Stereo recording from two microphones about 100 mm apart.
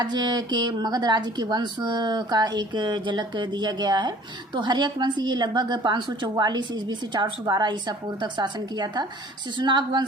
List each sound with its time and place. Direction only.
0.0 s a woman's voice: 45° right (ahead or behind)